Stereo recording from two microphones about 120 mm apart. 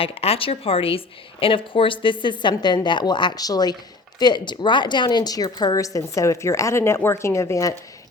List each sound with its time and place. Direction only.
0.0 s a woman's voice: 55° left (ahead or behind); by 7.7 s 25° left (ahead or behind)